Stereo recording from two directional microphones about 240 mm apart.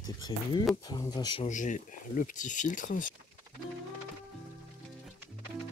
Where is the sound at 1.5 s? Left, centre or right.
Left.